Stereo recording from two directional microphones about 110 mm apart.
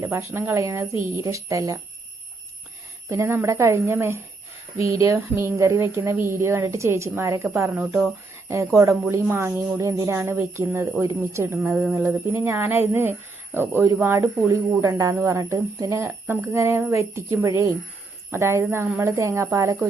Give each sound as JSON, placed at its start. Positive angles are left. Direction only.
{"t": 0.0, "sound": "speech", "side_deg": -25}
{"t": 3.1, "sound": "speech", "side_deg": -20}
{"t": 8.4, "sound": "speech", "side_deg": -25}
{"t": 11.7, "sound": "a sound", "side_deg": -10}
{"t": 11.9, "sound": "speech", "side_deg": -25}